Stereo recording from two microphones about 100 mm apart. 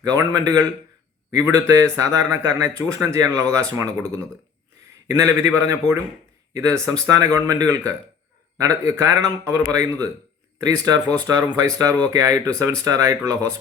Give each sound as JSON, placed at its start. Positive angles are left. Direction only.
{"t": 0.0, "sound": "speech", "side_deg": -40}
{"t": 1.4, "sound": "speech", "side_deg": -30}